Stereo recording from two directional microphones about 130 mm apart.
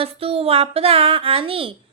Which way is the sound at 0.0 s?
45° right (ahead or behind).